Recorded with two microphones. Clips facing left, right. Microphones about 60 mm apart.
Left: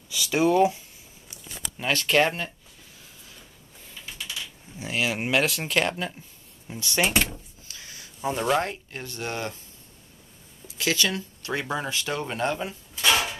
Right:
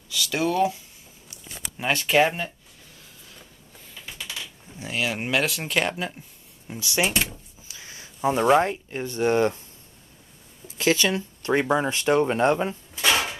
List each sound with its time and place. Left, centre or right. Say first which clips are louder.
0.1 s speech: left 3 dB; centre
1.8 s speech: right 2 dB; centre
4.2 s typing: even; right
4.7 s speech: even; centre
7.6 s speech: right 1 dB; right
10.8 s speech: right 4 dB; right
11.9 s speech: right 9 dB; right
12.9 s a sound: left 1 dB; centre